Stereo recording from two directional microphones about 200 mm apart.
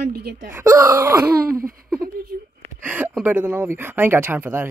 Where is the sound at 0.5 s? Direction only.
15° right (ahead or behind).